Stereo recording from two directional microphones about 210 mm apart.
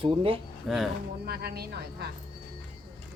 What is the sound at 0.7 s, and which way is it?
Speech, centre (ahead or behind).